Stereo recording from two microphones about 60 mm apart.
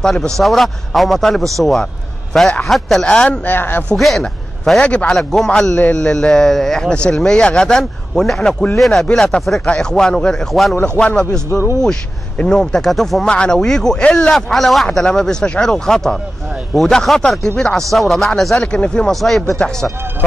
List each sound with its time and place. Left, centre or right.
0.0 s a man's voice: centre
3.4 s speech: left
3.9 s a man's voice: centre
4.8 s speech: centre
5.1 s a man's voice: centre
13.3 s a man's voice: centre
14.5 s a man's voice: centre
19.1 s a man's voice: centre